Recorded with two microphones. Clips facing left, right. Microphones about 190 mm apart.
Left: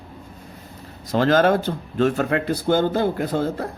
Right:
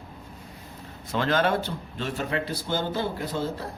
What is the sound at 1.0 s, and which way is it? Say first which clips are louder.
A man's voice: left 7 dB; 40° left (ahead or behind).